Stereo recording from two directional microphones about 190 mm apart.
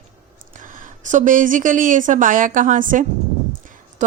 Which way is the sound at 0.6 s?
45° right (ahead or behind).